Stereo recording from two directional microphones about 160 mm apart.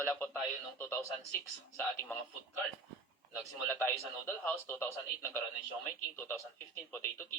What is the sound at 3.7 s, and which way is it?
A man's voice, 15° left (ahead or behind).